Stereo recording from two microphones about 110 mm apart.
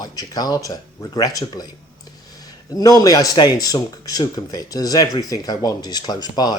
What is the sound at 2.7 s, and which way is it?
Speech, 35° left (ahead or behind).